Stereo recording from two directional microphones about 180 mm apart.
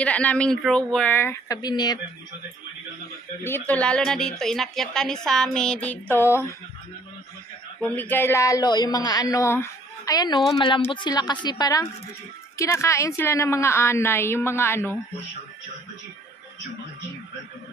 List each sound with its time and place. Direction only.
0.0 s a woman's voice: 5° left (ahead or behind)
3.4 s a woman's voice: 10° left (ahead or behind)
7.8 s a woman's voice: 10° left (ahead or behind)